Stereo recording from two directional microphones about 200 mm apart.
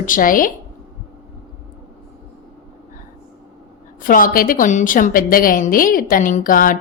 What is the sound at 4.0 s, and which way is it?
A woman's voice, 45° left (ahead or behind).